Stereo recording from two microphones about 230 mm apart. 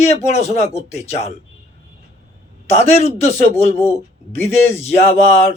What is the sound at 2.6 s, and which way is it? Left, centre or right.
Speech, left.